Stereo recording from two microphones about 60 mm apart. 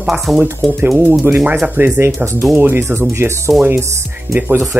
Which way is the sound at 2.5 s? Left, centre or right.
Right.